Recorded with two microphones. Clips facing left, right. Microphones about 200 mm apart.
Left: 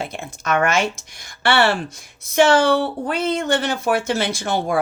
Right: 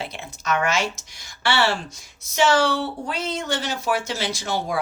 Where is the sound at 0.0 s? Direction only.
50° left (ahead or behind).